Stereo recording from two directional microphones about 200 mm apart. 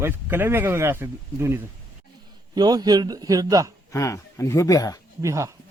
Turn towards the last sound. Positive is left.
turn(degrees=-15)  # may be behind; listen again after turning